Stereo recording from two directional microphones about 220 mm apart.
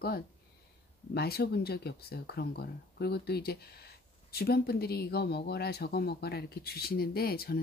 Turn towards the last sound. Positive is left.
turn(degrees=45)  # may be behind; listen again after turning